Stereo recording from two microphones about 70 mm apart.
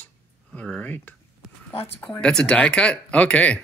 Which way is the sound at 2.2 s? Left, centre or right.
Centre.